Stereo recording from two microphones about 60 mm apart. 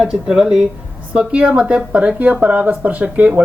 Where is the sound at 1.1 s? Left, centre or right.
Right.